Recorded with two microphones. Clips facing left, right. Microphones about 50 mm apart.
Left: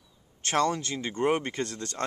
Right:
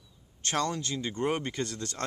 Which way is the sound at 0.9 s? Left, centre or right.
Left.